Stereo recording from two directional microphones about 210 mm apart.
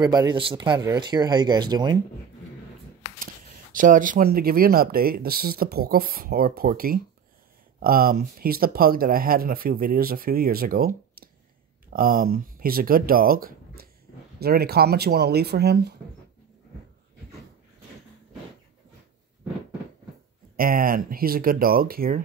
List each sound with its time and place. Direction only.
0.0 s speech: 20° right (ahead or behind)
3.7 s speech: 40° right (ahead or behind)
20.5 s speech: 45° right (ahead or behind)